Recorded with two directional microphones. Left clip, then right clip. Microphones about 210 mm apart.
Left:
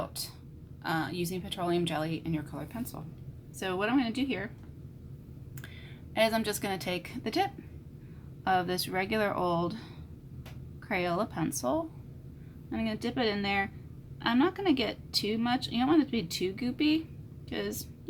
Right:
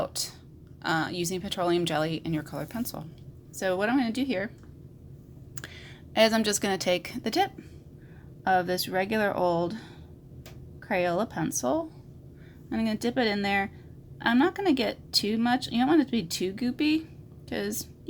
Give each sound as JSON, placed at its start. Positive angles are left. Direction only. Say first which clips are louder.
{"t": 0.0, "sound": "a sound", "louder": "right 6 dB", "side_deg": -40}
{"t": 0.8, "sound": "a woman's voice", "louder": "right 4 dB", "side_deg": -40}
{"t": 5.5, "sound": "a woman's voice", "louder": "right 6 dB", "side_deg": -40}
{"t": 12.7, "sound": "a woman's voice", "louder": "right 5 dB", "side_deg": -40}